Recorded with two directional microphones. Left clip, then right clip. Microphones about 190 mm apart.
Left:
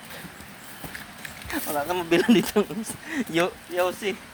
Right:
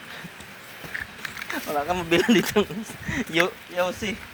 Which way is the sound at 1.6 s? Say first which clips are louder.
Right 1 dB; 45° right (ahead or behind).